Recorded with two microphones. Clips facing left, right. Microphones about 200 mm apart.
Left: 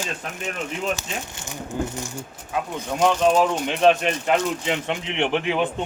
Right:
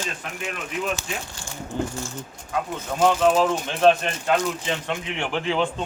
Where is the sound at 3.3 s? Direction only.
20° left (ahead or behind).